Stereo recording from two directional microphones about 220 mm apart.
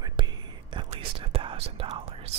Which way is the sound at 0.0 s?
20° right (ahead or behind).